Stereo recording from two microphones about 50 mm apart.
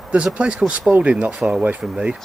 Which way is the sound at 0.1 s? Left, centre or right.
Right.